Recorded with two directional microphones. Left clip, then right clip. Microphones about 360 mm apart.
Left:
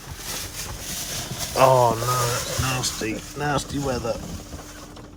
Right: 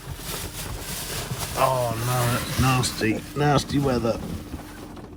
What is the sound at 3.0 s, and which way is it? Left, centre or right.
Speech, right.